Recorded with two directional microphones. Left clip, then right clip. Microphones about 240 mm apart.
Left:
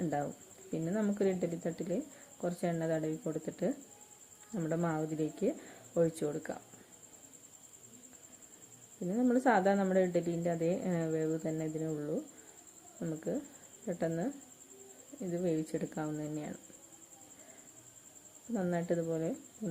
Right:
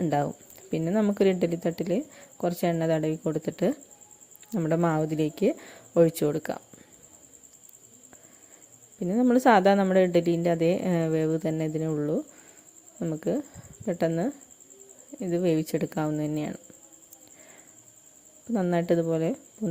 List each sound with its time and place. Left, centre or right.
0.0 s speech: right
9.0 s speech: right
18.5 s speech: right